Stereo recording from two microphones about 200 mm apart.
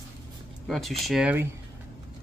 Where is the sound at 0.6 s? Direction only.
Centre (ahead or behind).